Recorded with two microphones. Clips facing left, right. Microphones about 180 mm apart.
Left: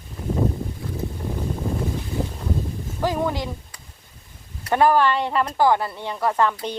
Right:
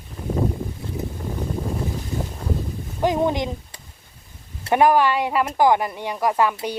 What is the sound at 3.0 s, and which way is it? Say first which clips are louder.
Speech: right 3 dB; 20° right (ahead or behind).